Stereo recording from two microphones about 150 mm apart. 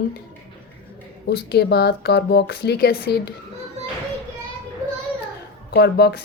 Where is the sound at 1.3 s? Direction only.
90° left.